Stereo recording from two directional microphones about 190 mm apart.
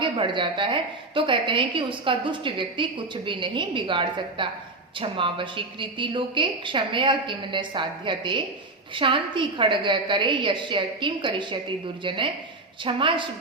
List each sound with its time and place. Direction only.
0.0 s a woman's voice: 25° right (ahead or behind)